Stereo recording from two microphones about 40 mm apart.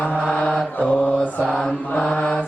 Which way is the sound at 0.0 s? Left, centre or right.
Right.